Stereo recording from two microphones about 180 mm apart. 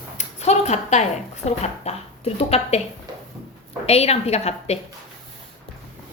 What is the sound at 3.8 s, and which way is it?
Speech, 35° left (ahead or behind).